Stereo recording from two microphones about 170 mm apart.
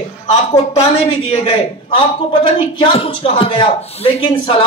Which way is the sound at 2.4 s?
30° left (ahead or behind).